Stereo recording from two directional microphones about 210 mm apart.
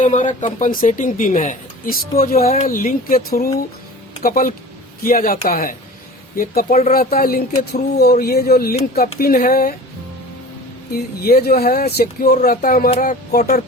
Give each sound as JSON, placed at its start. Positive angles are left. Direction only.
{"t": 0.0, "sound": "a woman's voice", "side_deg": 35}
{"t": 11.2, "sound": "a woman's voice", "side_deg": 45}